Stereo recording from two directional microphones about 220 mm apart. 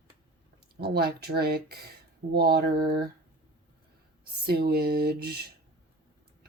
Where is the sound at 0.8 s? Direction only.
45° right (ahead or behind).